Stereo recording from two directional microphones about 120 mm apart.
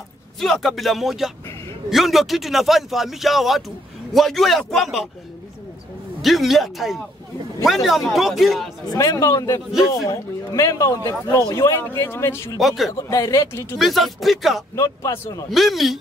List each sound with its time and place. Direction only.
0.4 s a man's voice: 5° left (ahead or behind)
6.2 s a man's voice: centre (ahead or behind)
8.8 s a man's voice: 30° left (ahead or behind)
12.5 s a man's voice: centre (ahead or behind)
12.9 s a man's voice: 25° left (ahead or behind)
13.7 s a man's voice: centre (ahead or behind)
14.8 s a man's voice: 25° left (ahead or behind)
15.5 s a man's voice: centre (ahead or behind)